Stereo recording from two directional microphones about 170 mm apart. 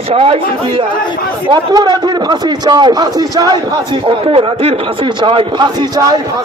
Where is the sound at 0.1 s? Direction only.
35° right (ahead or behind).